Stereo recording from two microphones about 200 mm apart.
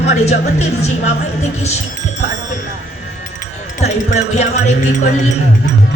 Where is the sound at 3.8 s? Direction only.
35° left (ahead or behind).